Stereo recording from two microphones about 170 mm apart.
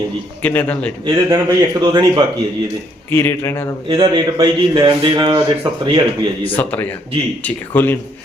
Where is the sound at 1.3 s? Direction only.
20° right (ahead or behind).